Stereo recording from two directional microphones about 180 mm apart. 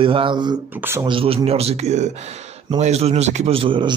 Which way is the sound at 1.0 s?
30° right (ahead or behind).